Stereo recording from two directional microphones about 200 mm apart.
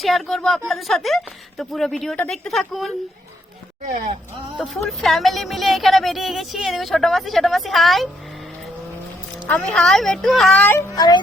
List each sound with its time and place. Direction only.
0.0 s speech: centre (ahead or behind)
4.5 s speech: centre (ahead or behind)
9.5 s speech: 5° left (ahead or behind)
10.9 s speech: 20° left (ahead or behind)